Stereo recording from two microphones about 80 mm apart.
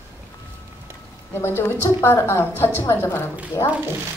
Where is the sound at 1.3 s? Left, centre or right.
Left.